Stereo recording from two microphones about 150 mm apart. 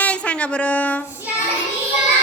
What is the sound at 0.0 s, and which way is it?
Speech, 10° left (ahead or behind).